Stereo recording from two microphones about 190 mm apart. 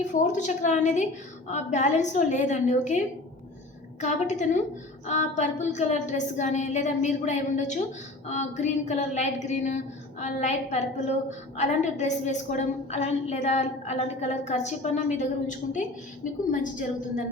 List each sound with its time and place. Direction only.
0.1 s a woman's voice: 40° left (ahead or behind)
4.0 s a woman's voice: 40° left (ahead or behind)